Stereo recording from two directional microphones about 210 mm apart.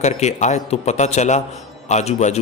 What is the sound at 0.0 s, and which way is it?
A man's voice, 30° left (ahead or behind).